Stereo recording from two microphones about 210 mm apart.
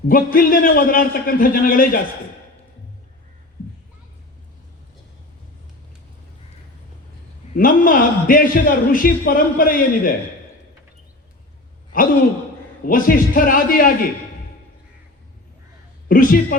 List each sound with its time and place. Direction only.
0.1 s a man's voice: 40° left (ahead or behind)
7.5 s a man's voice: 40° left (ahead or behind)
12.8 s a man's voice: 45° left (ahead or behind)
16.0 s a man's voice: 45° left (ahead or behind)